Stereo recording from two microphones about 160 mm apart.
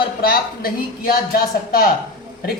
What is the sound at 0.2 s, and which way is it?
Speech, 70° left (ahead or behind).